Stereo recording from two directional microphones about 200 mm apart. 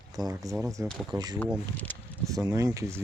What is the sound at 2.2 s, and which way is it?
Speech, 15° right (ahead or behind).